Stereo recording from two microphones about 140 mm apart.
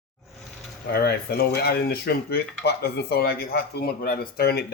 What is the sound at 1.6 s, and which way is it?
Speech, 90° left.